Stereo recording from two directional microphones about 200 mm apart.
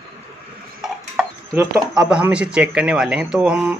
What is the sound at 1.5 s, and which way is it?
Speech, 15° right (ahead or behind).